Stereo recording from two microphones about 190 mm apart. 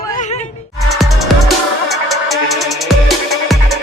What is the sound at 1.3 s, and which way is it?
Music, centre (ahead or behind).